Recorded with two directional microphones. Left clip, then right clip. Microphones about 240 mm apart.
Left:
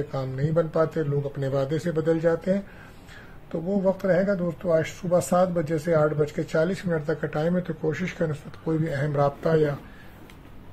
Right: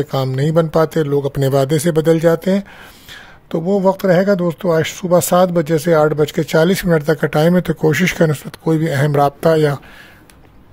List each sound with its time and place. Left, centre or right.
0.1 s speech: right